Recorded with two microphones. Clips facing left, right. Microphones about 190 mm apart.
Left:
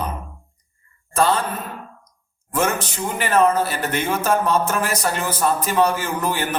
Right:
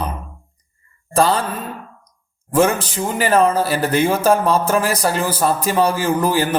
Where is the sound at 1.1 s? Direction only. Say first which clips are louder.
Right 3 dB; 35° right (ahead or behind).